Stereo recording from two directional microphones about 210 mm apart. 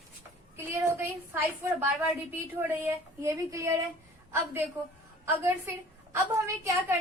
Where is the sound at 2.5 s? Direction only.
10° right (ahead or behind).